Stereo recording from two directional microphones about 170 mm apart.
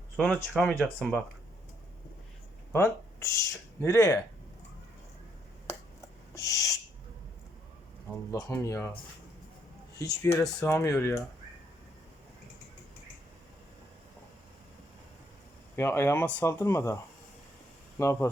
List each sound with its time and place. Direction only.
0.2 s speech: 5° left (ahead or behind)
2.7 s speech: 15° left (ahead or behind)
5.6 s owl: 20° left (ahead or behind)
8.1 s speech: 20° left (ahead or behind)
10.0 s speech: 20° left (ahead or behind)
15.7 s speech: 15° left (ahead or behind)